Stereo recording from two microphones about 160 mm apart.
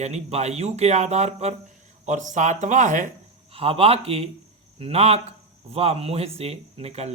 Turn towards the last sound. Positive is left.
turn(degrees=-40)  # may be behind; listen again after turning